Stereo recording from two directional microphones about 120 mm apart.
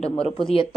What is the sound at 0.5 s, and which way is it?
Speech, 45° left (ahead or behind).